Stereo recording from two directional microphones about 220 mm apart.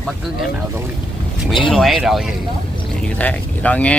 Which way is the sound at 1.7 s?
Centre (ahead or behind).